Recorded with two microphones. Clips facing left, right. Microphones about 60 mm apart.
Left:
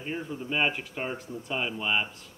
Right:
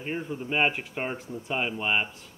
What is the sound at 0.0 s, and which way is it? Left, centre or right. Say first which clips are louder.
Speech: right 2 dB; right.